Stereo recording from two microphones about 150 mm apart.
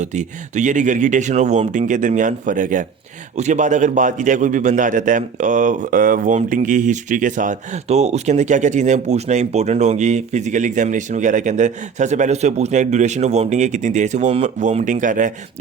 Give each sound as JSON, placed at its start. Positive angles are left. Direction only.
{"t": 0.0, "sound": "a man's voice", "side_deg": -55}